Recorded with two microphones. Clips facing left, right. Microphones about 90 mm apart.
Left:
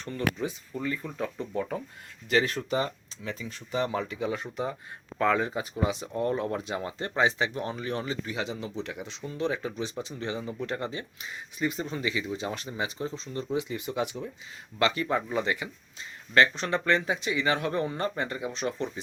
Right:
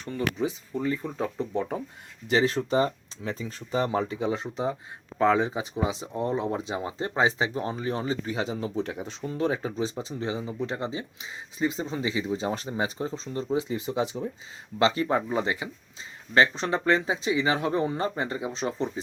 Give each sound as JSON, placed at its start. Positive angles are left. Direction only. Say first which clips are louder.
{"t": 0.0, "sound": "speech", "louder": "right 2 dB", "side_deg": -15}
{"t": 7.2, "sound": "speech", "louder": "right 1 dB", "side_deg": -30}